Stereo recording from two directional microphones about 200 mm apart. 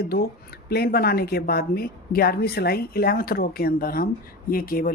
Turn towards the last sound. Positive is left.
turn(degrees=45)  # may be behind; listen again after turning